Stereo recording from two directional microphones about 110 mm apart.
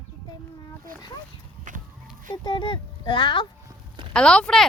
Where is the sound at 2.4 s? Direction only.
50° left (ahead or behind).